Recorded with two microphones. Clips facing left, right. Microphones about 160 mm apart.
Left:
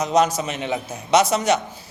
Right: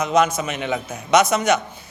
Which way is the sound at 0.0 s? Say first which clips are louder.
Even; 35° left (ahead or behind).